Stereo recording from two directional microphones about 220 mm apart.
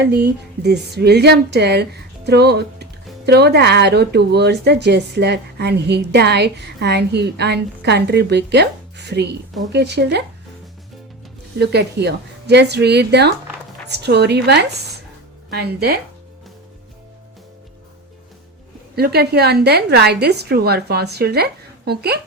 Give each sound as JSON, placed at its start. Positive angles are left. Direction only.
{"t": 0.0, "sound": "speech", "side_deg": -50}
{"t": 11.6, "sound": "speech", "side_deg": -50}
{"t": 18.9, "sound": "speech", "side_deg": -45}